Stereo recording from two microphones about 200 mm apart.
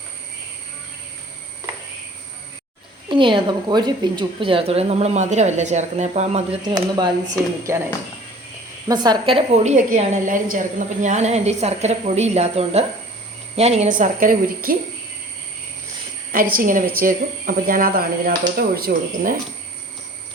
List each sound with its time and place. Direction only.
3.1 s a woman's voice: 25° right (ahead or behind)
6.7 s speech: 20° right (ahead or behind)
8.9 s a woman's voice: 25° right (ahead or behind); by 14.8 s 45° right (ahead or behind)
16.3 s speech: 45° right (ahead or behind)